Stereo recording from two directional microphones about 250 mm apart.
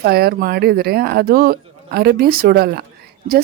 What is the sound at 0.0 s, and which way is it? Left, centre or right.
Speech, right.